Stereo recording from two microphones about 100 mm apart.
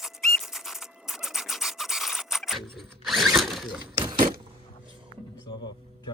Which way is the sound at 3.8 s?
60° right (ahead or behind).